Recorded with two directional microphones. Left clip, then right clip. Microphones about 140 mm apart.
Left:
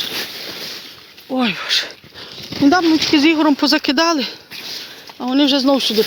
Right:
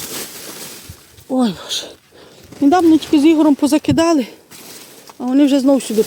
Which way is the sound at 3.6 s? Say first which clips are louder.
Even; 45° right (ahead or behind).